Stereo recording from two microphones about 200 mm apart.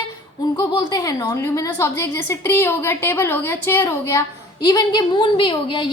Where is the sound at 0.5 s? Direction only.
15° left (ahead or behind).